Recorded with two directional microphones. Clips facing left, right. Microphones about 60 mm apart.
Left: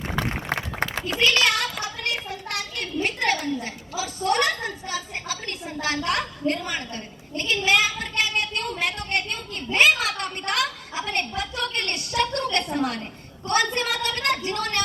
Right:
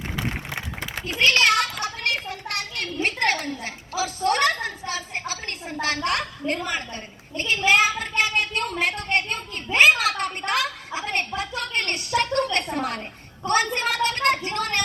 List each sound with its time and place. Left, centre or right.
1.2 s a sound: right
2.2 s a child's voice: right
6.5 s a woman's voice: right